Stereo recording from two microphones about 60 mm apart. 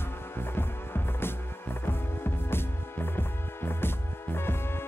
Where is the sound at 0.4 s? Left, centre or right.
Left.